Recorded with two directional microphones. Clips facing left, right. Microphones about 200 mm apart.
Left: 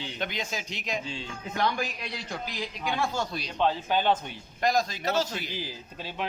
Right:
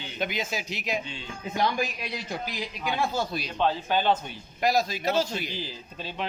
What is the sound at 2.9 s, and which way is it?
Speech, 5° right (ahead or behind).